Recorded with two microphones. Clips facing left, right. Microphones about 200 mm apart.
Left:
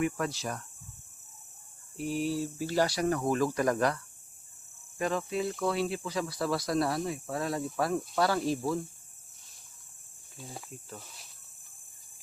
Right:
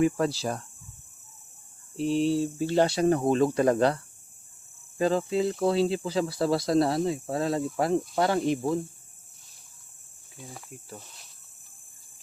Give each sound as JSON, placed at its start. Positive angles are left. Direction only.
{"t": 0.0, "sound": "speech", "side_deg": -30}
{"t": 2.0, "sound": "speech", "side_deg": -25}
{"t": 10.7, "sound": "speech", "side_deg": -10}